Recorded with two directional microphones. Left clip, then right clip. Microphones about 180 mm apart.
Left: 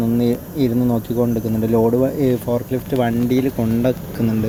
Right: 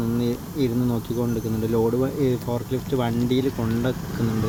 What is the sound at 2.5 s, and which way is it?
Speech, 5° left (ahead or behind).